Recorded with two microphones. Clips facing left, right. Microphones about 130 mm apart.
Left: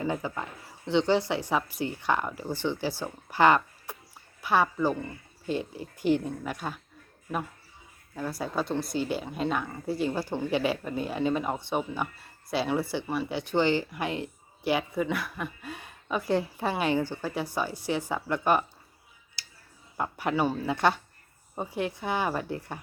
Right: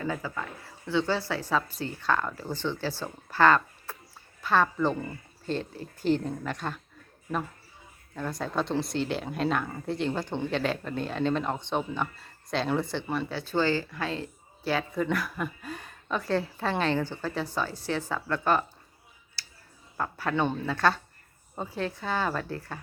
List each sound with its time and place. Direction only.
0.0 s speech: 20° left (ahead or behind)
8.1 s speech: 5° left (ahead or behind)
15.0 s speech: centre (ahead or behind)
19.4 s a sound: 20° left (ahead or behind)
20.0 s speech: 15° left (ahead or behind)